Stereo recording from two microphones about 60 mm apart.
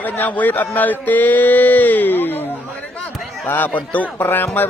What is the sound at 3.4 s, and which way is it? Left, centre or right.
A man's voice, left.